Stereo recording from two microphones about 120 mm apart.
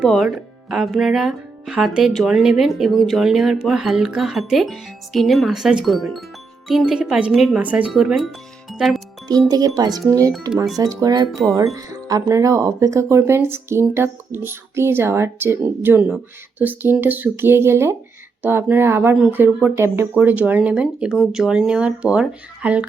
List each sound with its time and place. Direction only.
0.0 s speech: 5° right (ahead or behind)
9.5 s speech: 30° right (ahead or behind); by 22.9 s 10° right (ahead or behind)